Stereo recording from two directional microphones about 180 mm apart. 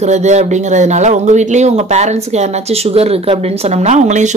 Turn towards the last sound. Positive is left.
turn(degrees=-40)  # may be behind; listen again after turning